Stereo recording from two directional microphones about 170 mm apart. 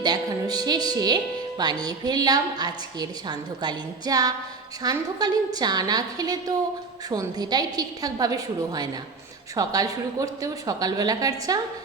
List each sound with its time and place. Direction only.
0.0 s speech: 25° right (ahead or behind)